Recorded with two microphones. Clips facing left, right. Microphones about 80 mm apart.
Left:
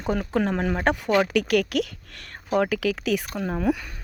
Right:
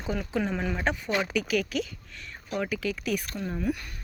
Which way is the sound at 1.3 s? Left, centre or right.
Left.